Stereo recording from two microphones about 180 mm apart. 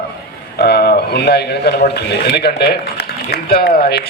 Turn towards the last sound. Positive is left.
turn(degrees=60)  # may be behind; listen again after turning